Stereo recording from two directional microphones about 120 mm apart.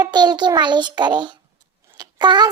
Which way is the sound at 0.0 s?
35° right (ahead or behind).